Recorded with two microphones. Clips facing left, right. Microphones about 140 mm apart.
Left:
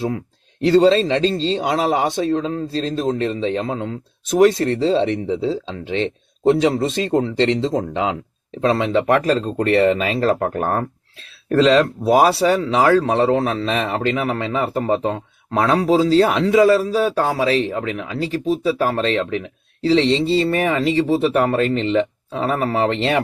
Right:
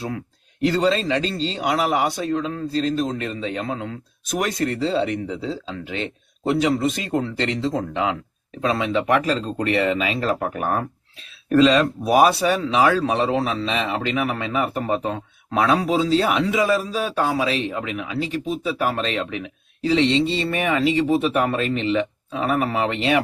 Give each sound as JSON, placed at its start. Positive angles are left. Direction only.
{"t": 0.6, "sound": "speech", "side_deg": 25}
{"t": 13.3, "sound": "speech", "side_deg": 50}